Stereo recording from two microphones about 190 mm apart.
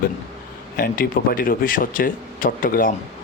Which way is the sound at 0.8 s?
50° left (ahead or behind).